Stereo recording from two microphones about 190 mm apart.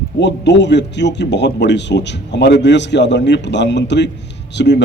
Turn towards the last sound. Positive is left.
turn(degrees=65)  # may be behind; listen again after turning